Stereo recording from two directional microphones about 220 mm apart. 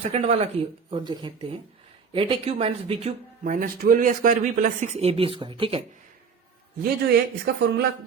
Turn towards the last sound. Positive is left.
turn(degrees=-45)  # may be behind; listen again after turning